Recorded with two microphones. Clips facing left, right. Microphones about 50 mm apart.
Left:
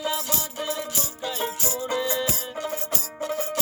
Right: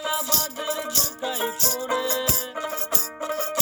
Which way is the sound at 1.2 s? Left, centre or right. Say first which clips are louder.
Right 2 dB; centre.